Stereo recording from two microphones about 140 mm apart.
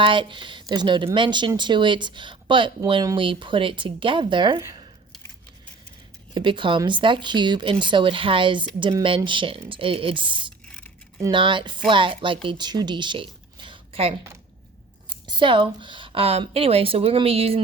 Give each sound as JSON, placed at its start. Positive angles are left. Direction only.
{"t": 0.0, "sound": "speech", "side_deg": -35}
{"t": 6.3, "sound": "speech", "side_deg": -35}